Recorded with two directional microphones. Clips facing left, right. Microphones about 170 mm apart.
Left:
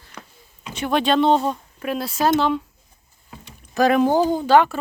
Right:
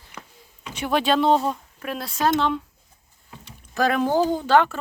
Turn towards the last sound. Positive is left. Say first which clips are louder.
# left 3 dB
turn(degrees=10)  # may be behind; listen again after turning